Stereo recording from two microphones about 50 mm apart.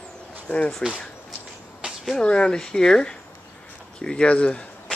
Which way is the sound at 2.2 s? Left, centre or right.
Centre.